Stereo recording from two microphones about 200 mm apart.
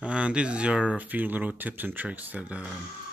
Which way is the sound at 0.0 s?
5° right (ahead or behind).